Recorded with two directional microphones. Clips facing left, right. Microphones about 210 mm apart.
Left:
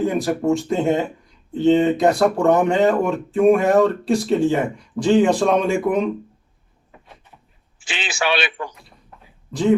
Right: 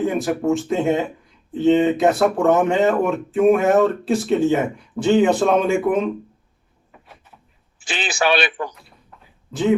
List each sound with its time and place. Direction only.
0.0 s speech: centre (ahead or behind)
7.9 s speech: 40° right (ahead or behind)
9.5 s speech: 5° right (ahead or behind)